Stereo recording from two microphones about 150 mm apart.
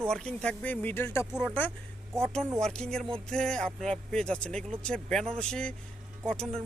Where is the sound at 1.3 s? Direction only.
5° right (ahead or behind).